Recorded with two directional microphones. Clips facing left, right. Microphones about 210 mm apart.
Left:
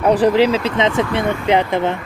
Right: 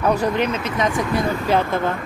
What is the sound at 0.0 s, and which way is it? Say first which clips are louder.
Speech: left 6 dB; 30° left (ahead or behind).